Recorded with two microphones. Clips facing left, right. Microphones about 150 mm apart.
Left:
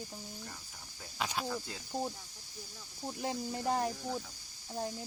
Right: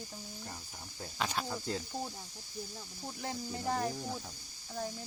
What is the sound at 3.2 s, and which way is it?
Speech, 20° left (ahead or behind).